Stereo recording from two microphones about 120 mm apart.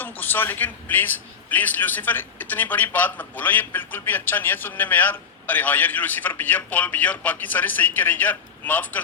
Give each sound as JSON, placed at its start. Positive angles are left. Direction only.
{"t": 0.0, "sound": "a man's voice", "side_deg": 15}